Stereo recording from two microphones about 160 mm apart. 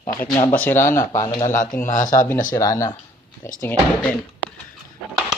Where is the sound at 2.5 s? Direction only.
20° left (ahead or behind).